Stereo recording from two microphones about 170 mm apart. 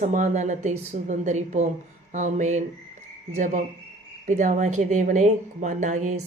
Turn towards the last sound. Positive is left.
turn(degrees=-45)  # may be behind; listen again after turning